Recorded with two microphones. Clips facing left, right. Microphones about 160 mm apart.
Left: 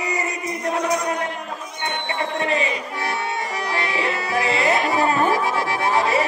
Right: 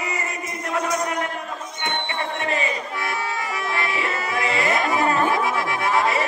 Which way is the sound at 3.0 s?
25° left (ahead or behind).